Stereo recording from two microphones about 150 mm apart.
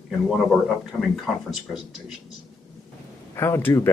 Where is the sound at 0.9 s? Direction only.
Centre (ahead or behind).